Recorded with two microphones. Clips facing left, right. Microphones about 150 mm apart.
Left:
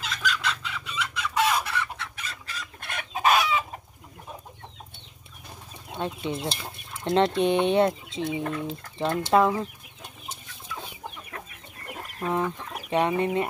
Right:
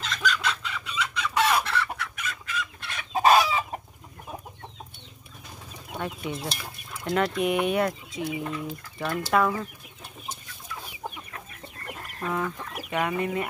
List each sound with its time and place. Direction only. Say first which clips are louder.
0.0 s chicken: right 2 dB; 5° left (ahead or behind)
1.6 s chicken: right 2 dB; 15° left (ahead or behind)
2.0 s chicken: right 3 dB; 30° left (ahead or behind)
3.1 s chicken: right 3 dB; 35° right (ahead or behind)
5.9 s speech: left 2 dB; 25° left (ahead or behind)
12.2 s speech: left 3 dB; 25° left (ahead or behind)